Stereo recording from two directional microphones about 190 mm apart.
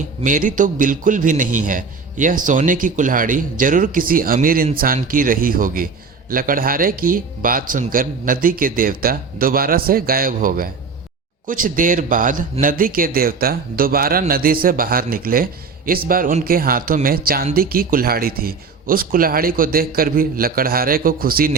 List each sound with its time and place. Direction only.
0.2 s speech: 45° right (ahead or behind)